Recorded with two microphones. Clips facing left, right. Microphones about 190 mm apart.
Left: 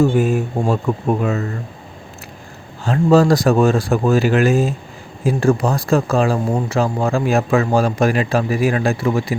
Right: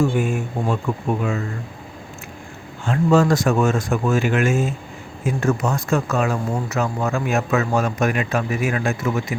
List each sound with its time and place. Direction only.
0.1 s speech: 35° left (ahead or behind)
2.8 s speech: 35° left (ahead or behind)